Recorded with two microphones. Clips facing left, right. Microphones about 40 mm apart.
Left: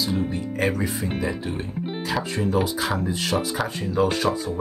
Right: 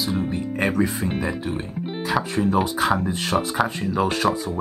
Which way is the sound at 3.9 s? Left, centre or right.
Right.